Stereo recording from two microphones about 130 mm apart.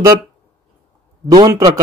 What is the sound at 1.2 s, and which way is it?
Speech, 30° right (ahead or behind).